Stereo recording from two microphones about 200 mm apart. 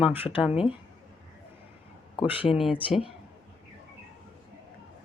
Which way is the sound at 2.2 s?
10° right (ahead or behind).